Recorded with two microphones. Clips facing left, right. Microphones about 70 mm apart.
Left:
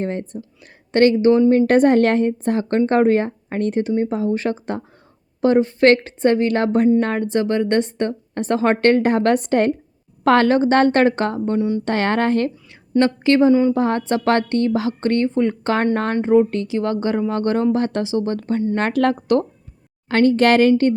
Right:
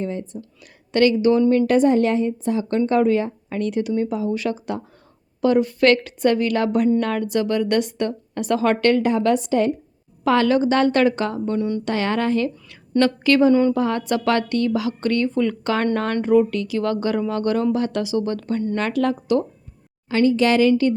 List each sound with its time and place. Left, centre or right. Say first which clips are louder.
0.0 s speech: left 3 dB; left
0.6 s a woman's voice: left 3 dB; left
1.6 s a woman's voice: left 3 dB; left
11.9 s speech: left 2 dB; left
13.0 s a woman's voice: left 1 dB; left
13.5 s a woman's voice: left 1 dB; centre
13.7 s a woman's voice: left 2 dB; left
18.8 s speech: left 4 dB; left